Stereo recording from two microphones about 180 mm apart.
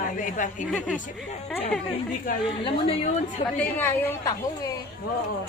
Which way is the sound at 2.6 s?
30° left (ahead or behind).